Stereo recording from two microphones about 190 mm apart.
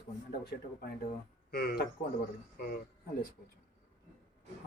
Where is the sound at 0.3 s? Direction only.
50° left (ahead or behind).